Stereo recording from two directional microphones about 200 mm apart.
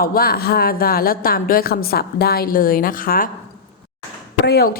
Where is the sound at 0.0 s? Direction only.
50° left (ahead or behind).